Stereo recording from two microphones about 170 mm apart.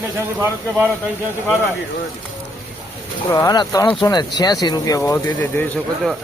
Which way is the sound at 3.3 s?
20° left (ahead or behind).